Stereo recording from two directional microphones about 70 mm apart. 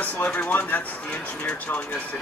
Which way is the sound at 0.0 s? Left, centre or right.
Centre.